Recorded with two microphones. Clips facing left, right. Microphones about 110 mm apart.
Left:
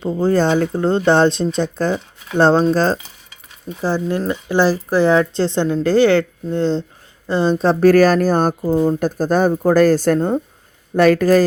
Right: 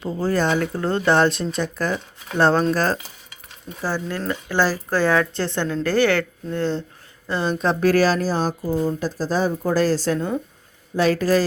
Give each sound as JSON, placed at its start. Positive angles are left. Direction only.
{"t": 0.0, "sound": "a woman's voice", "side_deg": 25}